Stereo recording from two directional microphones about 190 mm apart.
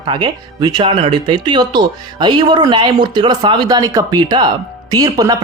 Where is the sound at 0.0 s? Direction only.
25° right (ahead or behind).